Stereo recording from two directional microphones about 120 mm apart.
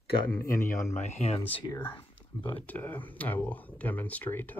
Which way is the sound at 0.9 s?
65° left (ahead or behind).